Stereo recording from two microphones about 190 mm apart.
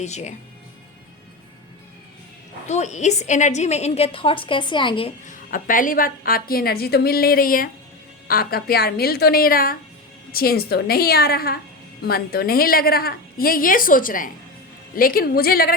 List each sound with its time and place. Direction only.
0.0 s a woman's voice: 35° left (ahead or behind)
2.6 s a woman's voice: 35° left (ahead or behind)
5.2 s a woman's voice: 45° left (ahead or behind)